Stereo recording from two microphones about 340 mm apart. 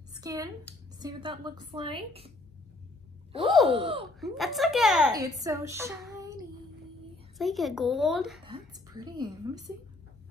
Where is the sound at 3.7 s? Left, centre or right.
Centre.